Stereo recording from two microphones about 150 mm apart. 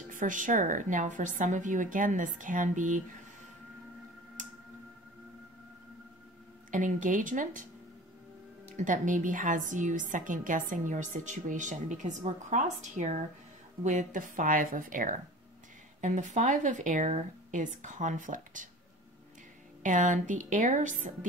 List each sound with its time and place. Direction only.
0.1 s a woman's voice: 60° right (ahead or behind)
6.7 s a woman's voice: 60° right (ahead or behind)
8.7 s a woman's voice: 60° right (ahead or behind)
19.8 s a woman's voice: 60° right (ahead or behind)